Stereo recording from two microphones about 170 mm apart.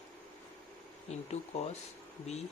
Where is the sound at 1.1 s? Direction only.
40° left (ahead or behind).